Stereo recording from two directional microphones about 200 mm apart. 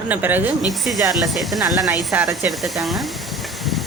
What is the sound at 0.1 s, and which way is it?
Speech, 10° right (ahead or behind).